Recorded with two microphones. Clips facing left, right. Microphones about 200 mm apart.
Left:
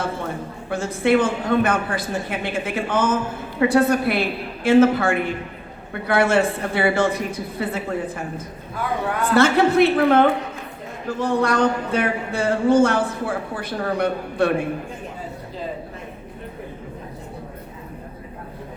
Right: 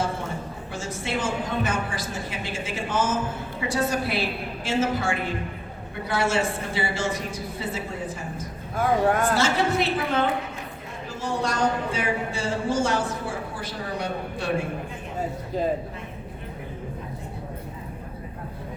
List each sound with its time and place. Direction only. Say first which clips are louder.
0.7 s speech: left 12 dB; 60° left (ahead or behind)
8.7 s speech: right 4 dB; 45° right (ahead or behind)
9.3 s speech: left 7 dB; 60° left (ahead or behind)